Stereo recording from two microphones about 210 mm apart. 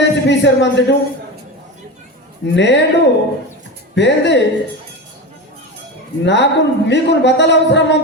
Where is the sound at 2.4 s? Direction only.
55° left (ahead or behind).